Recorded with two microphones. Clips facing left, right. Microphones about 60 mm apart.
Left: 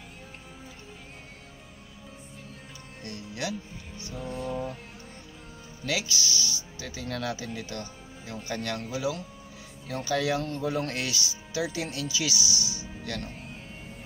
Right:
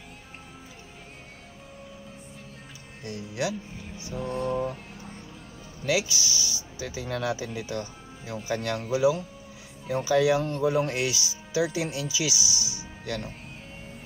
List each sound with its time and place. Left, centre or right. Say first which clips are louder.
3.0 s speech: right 5 dB; centre
4.3 s speech: right 5 dB; right
5.9 s speech: right 4 dB; centre